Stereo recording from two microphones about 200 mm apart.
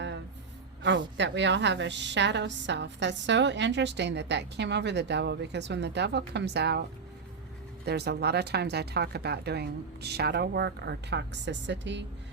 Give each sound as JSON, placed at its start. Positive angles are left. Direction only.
{"t": 0.8, "sound": "a woman's voice", "side_deg": -65}
{"t": 7.9, "sound": "a woman's voice", "side_deg": -55}